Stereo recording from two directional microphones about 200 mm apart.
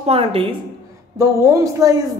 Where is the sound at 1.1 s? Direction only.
15° right (ahead or behind).